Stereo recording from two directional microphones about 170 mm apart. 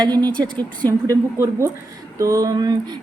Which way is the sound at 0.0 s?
25° right (ahead or behind).